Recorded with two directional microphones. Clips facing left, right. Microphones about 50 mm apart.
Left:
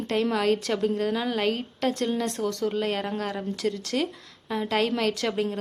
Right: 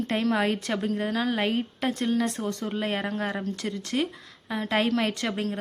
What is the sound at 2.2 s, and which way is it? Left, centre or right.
A woman's voice, centre.